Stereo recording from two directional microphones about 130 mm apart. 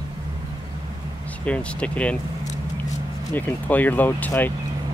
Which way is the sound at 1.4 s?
10° left (ahead or behind).